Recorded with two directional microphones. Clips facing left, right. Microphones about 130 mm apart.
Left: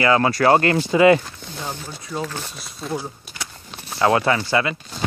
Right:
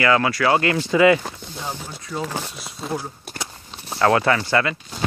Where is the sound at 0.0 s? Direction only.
25° left (ahead or behind).